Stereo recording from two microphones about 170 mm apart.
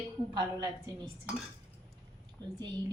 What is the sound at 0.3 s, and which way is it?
Speech, 25° right (ahead or behind).